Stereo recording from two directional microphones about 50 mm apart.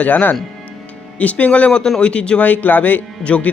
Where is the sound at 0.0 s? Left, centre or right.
Left.